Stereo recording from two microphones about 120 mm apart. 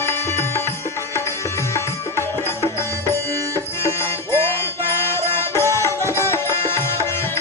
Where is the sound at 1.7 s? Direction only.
25° left (ahead or behind).